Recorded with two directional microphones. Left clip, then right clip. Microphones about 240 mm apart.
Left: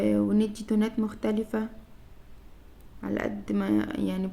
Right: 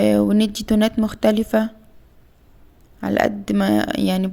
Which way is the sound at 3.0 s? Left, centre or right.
Right.